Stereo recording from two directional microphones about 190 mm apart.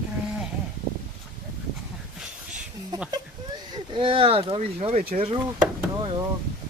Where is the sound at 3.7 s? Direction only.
25° right (ahead or behind).